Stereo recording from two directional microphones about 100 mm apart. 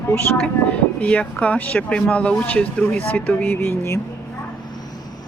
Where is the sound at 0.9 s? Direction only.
15° left (ahead or behind).